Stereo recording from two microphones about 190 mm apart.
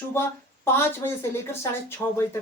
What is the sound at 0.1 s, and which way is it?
Speech, 15° left (ahead or behind).